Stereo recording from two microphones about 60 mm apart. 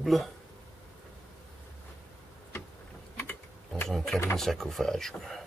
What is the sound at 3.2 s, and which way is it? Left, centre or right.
Mechanisms, left.